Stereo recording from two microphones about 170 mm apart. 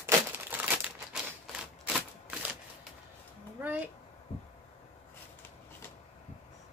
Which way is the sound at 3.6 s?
10° right (ahead or behind).